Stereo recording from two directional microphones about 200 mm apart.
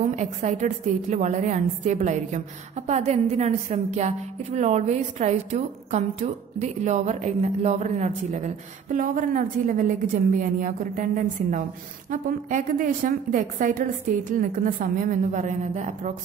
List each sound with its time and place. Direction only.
0.1 s a woman's voice: 35° right (ahead or behind)